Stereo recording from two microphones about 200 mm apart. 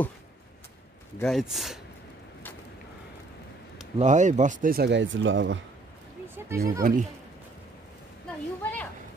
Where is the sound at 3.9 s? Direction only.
35° right (ahead or behind); by 5.6 s 70° right (ahead or behind).